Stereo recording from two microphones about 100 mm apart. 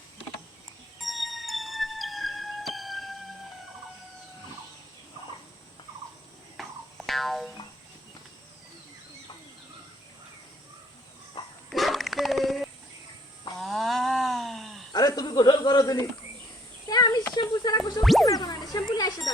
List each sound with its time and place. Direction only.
1.0 s music: centre (ahead or behind)
6.6 s music: centre (ahead or behind)
11.4 s dog: 55° left (ahead or behind)
11.7 s dog: centre (ahead or behind)
13.6 s a sound: centre (ahead or behind)
14.9 s snake: 40° left (ahead or behind)
16.9 s a sound: 45° left (ahead or behind)
18.0 s music: centre (ahead or behind)
18.3 s a sound: 40° left (ahead or behind)